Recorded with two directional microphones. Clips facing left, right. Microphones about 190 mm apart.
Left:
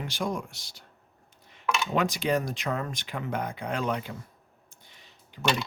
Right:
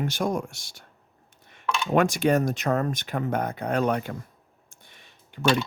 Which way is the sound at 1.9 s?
50° right (ahead or behind).